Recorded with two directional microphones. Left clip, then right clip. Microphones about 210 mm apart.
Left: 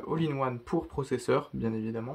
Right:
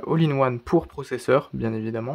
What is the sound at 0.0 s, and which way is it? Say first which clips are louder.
Speech: right 9 dB; 50° right (ahead or behind).